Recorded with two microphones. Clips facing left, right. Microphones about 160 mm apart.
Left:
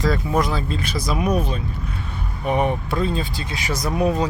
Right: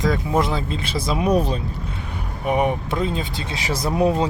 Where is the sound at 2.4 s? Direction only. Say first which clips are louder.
Right 1 dB; 10° right (ahead or behind); by 4.3 s 25° right (ahead or behind).